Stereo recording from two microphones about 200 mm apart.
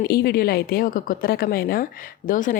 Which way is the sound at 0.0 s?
55° left (ahead or behind).